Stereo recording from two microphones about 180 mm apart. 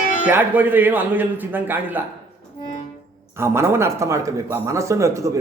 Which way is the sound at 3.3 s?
15° right (ahead or behind).